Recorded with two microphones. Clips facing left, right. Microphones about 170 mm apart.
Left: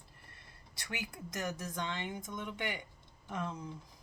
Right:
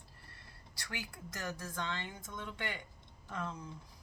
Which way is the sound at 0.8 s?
20° left (ahead or behind).